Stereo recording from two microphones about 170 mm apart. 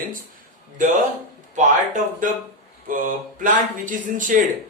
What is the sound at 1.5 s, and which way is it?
A man's voice, 50° right (ahead or behind).